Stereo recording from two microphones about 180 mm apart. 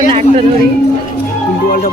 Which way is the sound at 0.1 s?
35° right (ahead or behind).